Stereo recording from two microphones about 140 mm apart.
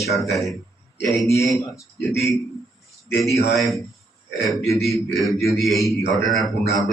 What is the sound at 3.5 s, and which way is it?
A man's voice, centre (ahead or behind).